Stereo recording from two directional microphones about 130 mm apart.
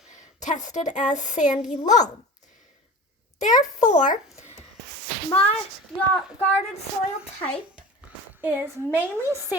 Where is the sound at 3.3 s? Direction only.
75° left (ahead or behind).